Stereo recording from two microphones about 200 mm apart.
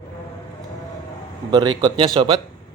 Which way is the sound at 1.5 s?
20° right (ahead or behind).